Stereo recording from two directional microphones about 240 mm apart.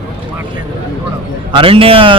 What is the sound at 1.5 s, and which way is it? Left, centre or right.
Speech, right.